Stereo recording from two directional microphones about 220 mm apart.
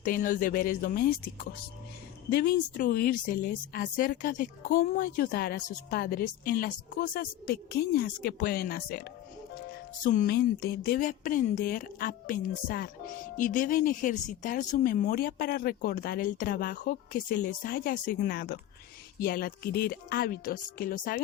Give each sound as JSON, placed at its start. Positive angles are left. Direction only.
{"t": 0.0, "sound": "speech", "side_deg": 40}
{"t": 2.3, "sound": "speech", "side_deg": 45}